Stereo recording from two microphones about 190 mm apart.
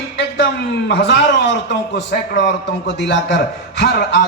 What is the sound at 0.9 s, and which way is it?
A man's voice, 65° left (ahead or behind).